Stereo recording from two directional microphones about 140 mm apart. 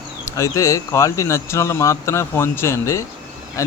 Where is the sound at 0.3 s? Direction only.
20° left (ahead or behind).